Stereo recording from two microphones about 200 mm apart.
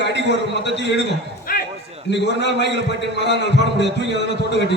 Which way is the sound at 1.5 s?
45° left (ahead or behind).